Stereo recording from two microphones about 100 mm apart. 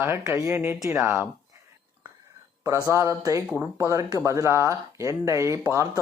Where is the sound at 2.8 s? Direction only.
30° right (ahead or behind).